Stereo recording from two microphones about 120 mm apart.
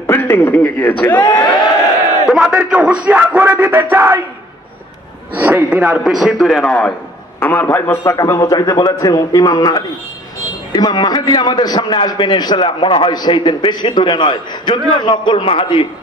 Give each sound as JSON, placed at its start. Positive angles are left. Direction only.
{"t": 0.0, "sound": "speech", "side_deg": 20}
{"t": 2.2, "sound": "a man's voice", "side_deg": -5}
{"t": 5.3, "sound": "a man's voice", "side_deg": -15}
{"t": 8.0, "sound": "a man's voice", "side_deg": 30}